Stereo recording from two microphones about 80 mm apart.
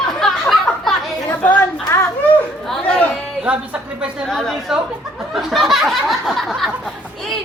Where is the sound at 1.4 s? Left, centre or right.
Left.